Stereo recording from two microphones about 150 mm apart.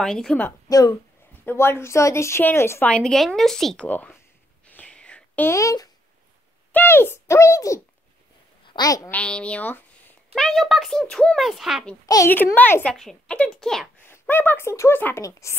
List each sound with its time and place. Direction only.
0.0 s speech: 5° left (ahead or behind)
0.7 s speech: 25° left (ahead or behind)
4.6 s a sound: 10° left (ahead or behind)
6.7 s a woman's voice: 15° left (ahead or behind)
9.1 s speech: 10° left (ahead or behind)
12.3 s speech: 15° left (ahead or behind)
14.0 s speech: 15° left (ahead or behind)